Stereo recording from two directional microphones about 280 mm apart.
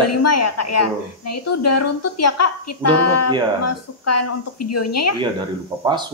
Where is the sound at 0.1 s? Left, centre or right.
Left.